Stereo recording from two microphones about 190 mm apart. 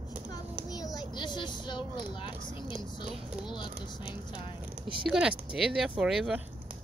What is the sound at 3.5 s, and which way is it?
Speech, 25° left (ahead or behind).